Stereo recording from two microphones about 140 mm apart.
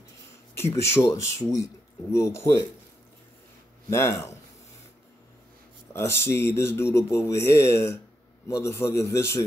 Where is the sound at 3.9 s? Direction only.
20° left (ahead or behind).